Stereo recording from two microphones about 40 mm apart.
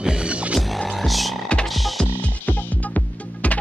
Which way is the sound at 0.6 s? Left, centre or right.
Centre.